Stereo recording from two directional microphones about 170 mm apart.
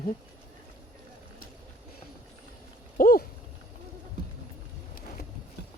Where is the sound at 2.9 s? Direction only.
55° left (ahead or behind).